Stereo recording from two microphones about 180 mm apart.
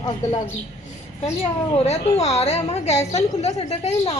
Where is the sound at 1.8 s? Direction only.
35° left (ahead or behind).